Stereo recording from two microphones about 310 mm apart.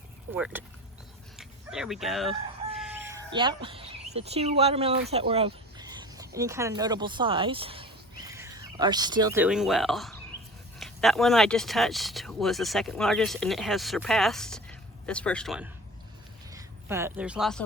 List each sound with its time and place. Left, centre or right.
0.3 s speech: centre
2.7 s chicken: centre
3.3 s speech: centre